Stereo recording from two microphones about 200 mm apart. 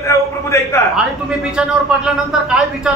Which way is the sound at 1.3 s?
5° right (ahead or behind).